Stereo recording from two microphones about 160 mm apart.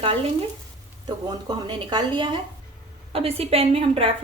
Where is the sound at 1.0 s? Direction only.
25° right (ahead or behind).